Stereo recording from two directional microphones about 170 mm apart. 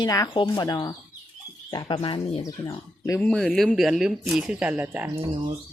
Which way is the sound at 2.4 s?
20° left (ahead or behind).